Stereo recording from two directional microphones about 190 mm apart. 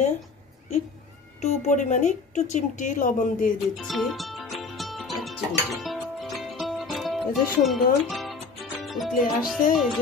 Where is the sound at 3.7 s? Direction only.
Centre (ahead or behind).